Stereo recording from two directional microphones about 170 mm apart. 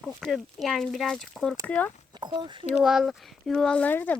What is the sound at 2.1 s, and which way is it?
Speech, 25° right (ahead or behind).